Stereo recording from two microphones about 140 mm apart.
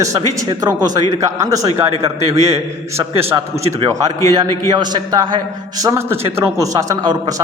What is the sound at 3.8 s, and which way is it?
A man's voice, 25° right (ahead or behind).